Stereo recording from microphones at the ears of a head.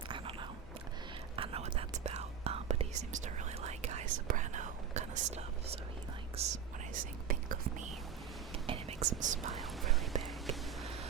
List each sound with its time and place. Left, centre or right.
1.4 s whispering: right